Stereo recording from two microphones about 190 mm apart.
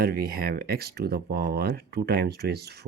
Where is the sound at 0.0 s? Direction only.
50° right (ahead or behind).